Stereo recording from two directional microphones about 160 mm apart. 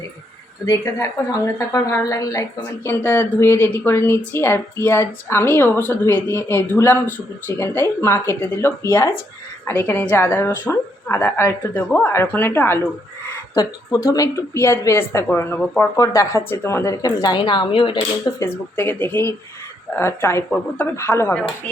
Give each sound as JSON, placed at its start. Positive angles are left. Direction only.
{"t": 0.6, "sound": "speech", "side_deg": 20}
{"t": 18.4, "sound": "speech", "side_deg": 15}